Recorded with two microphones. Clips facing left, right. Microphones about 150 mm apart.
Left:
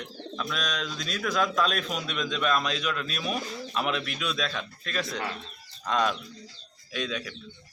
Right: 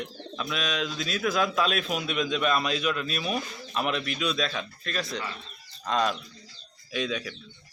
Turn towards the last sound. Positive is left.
turn(degrees=0)  # may be behind; listen again after turning